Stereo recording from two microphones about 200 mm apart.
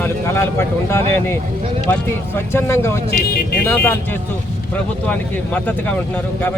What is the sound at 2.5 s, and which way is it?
Speech, 15° left (ahead or behind).